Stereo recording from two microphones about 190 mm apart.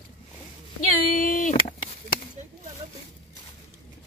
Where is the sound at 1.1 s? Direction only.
45° left (ahead or behind).